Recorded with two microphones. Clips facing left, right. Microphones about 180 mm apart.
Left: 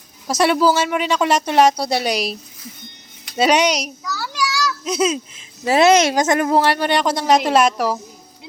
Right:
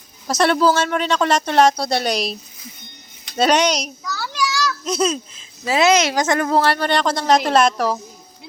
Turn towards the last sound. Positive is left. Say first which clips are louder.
# even
turn(degrees=5)  # may be behind; listen again after turning